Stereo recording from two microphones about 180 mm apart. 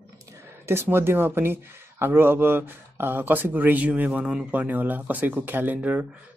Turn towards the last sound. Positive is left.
turn(degrees=-10)  # may be behind; listen again after turning